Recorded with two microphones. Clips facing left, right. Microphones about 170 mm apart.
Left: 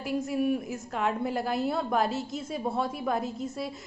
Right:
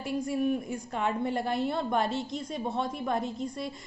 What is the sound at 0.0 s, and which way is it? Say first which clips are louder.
A woman's voice: left 1 dB; centre (ahead or behind).